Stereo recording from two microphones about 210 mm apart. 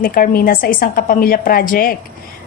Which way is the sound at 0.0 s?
45° left (ahead or behind).